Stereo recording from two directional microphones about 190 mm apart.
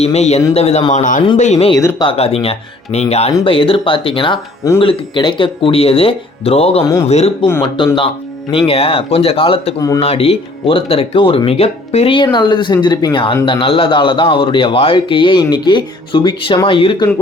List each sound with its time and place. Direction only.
0.0 s speech: 35° left (ahead or behind)
0.9 s a man's voice: 45° left (ahead or behind)
1.7 s speech: 20° left (ahead or behind)
2.0 s speech: 30° left (ahead or behind)